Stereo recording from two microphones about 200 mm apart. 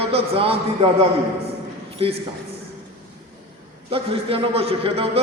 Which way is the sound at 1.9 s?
30° right (ahead or behind).